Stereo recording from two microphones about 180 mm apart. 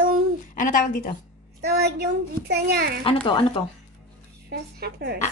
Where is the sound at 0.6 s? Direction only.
45° left (ahead or behind).